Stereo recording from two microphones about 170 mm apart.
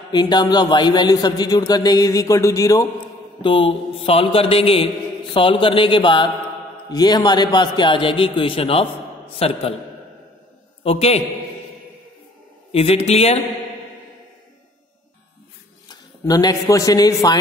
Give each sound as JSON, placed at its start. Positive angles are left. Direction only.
{"t": 0.1, "sound": "speech", "side_deg": 25}
{"t": 3.4, "sound": "mantra", "side_deg": 30}
{"t": 5.3, "sound": "speech", "side_deg": 30}
{"t": 9.4, "sound": "mantra", "side_deg": 35}
{"t": 10.8, "sound": "mantra", "side_deg": 35}
{"t": 12.7, "sound": "mantra", "side_deg": 35}
{"t": 15.9, "sound": "speech", "side_deg": 25}